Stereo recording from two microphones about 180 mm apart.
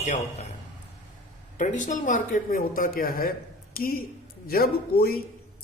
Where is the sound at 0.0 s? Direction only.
40° left (ahead or behind).